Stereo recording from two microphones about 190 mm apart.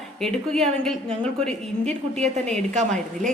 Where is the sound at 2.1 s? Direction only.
35° right (ahead or behind).